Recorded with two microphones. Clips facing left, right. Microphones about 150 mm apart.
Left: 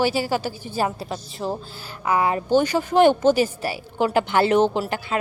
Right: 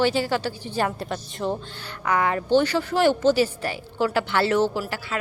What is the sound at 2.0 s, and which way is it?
Speech, 30° left (ahead or behind).